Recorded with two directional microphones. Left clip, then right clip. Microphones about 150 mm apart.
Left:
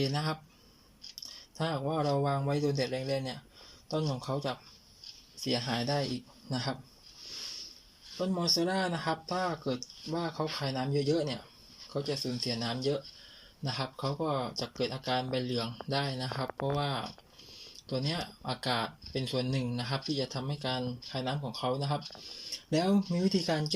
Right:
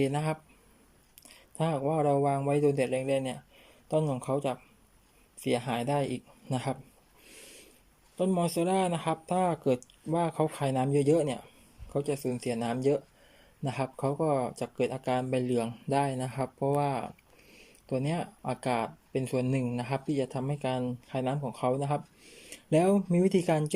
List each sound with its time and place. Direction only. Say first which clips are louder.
0.0 s speech: right 3 dB; 15° right (ahead or behind)
1.5 s speech: right 4 dB; 20° right (ahead or behind)
8.2 s speech: right 2 dB; 20° right (ahead or behind)